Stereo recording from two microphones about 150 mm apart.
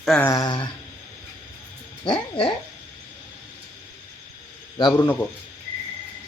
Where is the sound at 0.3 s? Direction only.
25° left (ahead or behind).